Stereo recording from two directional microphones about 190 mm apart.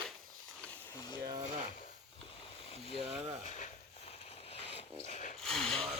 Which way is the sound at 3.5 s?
40° left (ahead or behind).